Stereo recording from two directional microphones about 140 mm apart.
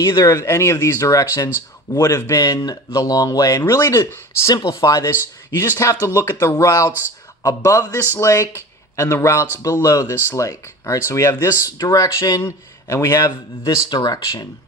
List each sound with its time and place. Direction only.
0.0 s speech: 25° left (ahead or behind)